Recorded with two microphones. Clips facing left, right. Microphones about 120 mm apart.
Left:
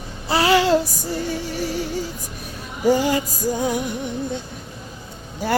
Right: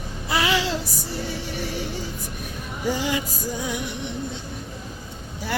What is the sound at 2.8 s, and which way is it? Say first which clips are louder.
Music: left 7 dB; 45° left (ahead or behind).